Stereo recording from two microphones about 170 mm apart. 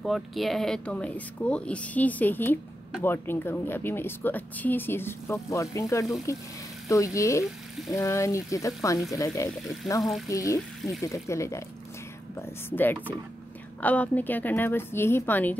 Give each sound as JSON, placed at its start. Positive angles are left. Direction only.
{"t": 0.0, "sound": "speech", "side_deg": 0}
{"t": 9.8, "sound": "speech", "side_deg": 0}
{"t": 10.2, "sound": "speech", "side_deg": 20}